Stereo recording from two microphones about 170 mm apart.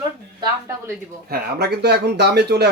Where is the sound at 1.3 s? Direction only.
70° right (ahead or behind).